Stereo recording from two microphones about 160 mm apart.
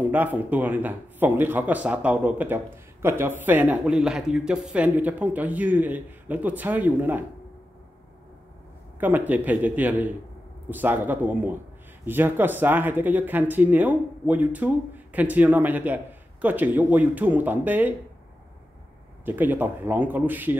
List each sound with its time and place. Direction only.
0.1 s speech: 10° right (ahead or behind)
9.0 s speech: 10° right (ahead or behind)
19.2 s speech: 10° right (ahead or behind)